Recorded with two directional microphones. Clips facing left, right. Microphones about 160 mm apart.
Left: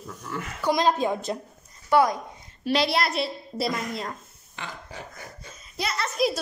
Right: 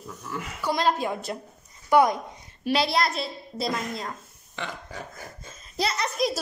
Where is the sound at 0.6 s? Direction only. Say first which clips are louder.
Left 2 dB; 15° left (ahead or behind).